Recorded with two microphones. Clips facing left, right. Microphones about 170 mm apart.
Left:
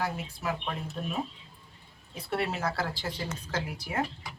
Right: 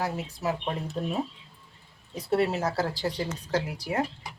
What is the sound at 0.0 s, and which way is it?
Speech, 40° right (ahead or behind).